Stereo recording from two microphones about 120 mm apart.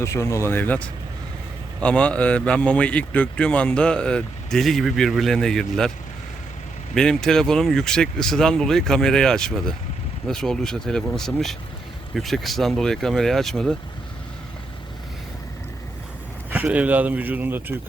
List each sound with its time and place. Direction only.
0.0 s speech: 25° left (ahead or behind)
1.8 s speech: 10° left (ahead or behind)
6.9 s speech: 5° left (ahead or behind)
16.5 s speech: 10° right (ahead or behind)